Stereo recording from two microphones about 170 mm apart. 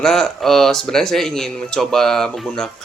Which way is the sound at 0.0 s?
5° left (ahead or behind).